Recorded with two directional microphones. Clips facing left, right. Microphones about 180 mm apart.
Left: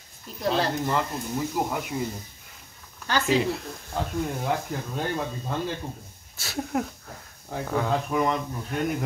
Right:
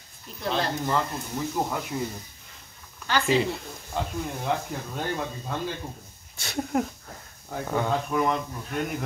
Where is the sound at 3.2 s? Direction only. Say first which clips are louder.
Left 1 dB; centre (ahead or behind).